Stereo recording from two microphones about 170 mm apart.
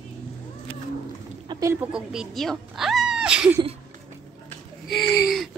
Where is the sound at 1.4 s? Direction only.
25° right (ahead or behind).